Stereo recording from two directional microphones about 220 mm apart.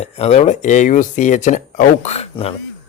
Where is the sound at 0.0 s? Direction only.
30° left (ahead or behind).